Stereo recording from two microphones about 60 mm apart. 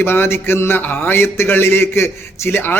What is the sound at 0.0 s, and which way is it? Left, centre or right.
Speech, left.